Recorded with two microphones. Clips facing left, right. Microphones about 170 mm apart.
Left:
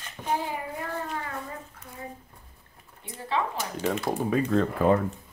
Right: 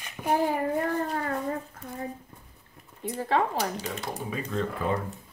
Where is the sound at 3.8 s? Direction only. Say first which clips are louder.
Left 7 dB; 55° left (ahead or behind).